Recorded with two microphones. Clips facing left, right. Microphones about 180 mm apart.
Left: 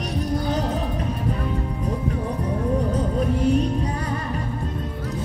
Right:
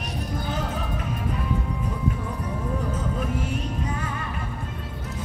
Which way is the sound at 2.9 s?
35° left (ahead or behind).